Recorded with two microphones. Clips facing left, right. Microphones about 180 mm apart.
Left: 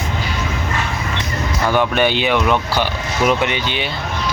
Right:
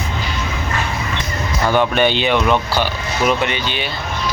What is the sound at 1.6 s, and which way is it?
Speech, 15° right (ahead or behind).